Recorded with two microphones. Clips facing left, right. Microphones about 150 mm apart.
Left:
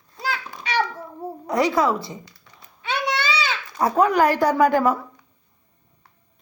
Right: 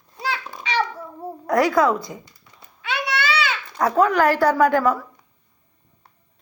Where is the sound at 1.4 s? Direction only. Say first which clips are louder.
Right 2 dB; centre (ahead or behind).